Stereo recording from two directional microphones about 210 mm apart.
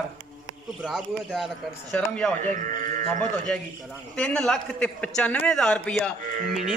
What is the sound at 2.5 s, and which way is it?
Speech, 40° right (ahead or behind).